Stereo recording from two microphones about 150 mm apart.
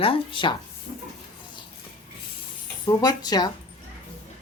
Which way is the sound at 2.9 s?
25° left (ahead or behind).